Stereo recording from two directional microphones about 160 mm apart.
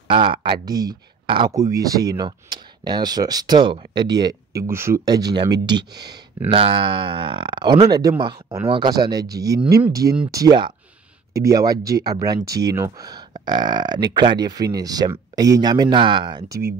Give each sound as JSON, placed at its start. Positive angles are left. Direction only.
{"t": 0.1, "sound": "speech", "side_deg": -30}
{"t": 6.5, "sound": "speech", "side_deg": -35}
{"t": 10.3, "sound": "speech", "side_deg": -25}